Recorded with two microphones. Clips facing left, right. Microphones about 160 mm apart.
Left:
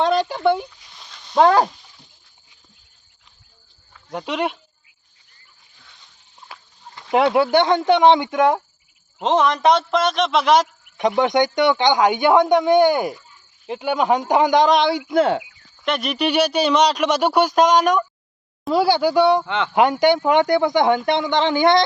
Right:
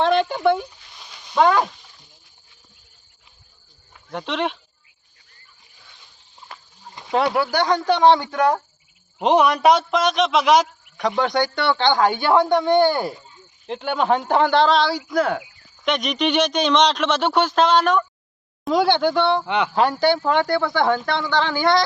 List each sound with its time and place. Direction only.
0.0 s a sound: centre (ahead or behind)
1.4 s speech: 35° left (ahead or behind)
4.1 s speech: 10° left (ahead or behind)
6.5 s livestock: 5° left (ahead or behind)
7.0 s a sound: 20° right (ahead or behind)
7.5 s speech: 25° left (ahead or behind)
9.2 s a man's voice: 15° right (ahead or behind)
10.9 s speech: 20° left (ahead or behind)
15.8 s speech: 5° left (ahead or behind)
19.5 s speech: 15° right (ahead or behind)
19.7 s speech: 20° left (ahead or behind)